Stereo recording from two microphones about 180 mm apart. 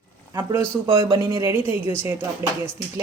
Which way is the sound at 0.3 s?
15° right (ahead or behind).